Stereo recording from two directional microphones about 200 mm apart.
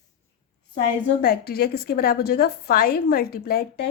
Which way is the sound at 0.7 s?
55° left (ahead or behind).